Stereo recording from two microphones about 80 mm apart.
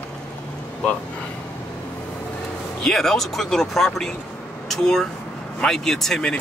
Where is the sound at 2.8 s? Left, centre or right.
Centre.